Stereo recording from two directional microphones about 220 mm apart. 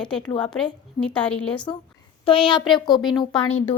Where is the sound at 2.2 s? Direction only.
25° left (ahead or behind).